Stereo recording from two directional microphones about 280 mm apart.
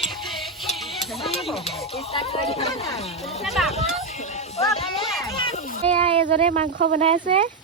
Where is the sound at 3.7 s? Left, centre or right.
Left.